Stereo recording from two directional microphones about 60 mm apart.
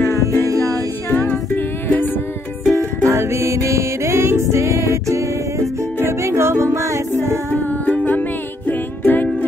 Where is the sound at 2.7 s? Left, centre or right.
Right.